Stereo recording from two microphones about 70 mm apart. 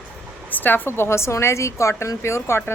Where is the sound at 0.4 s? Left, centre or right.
Left.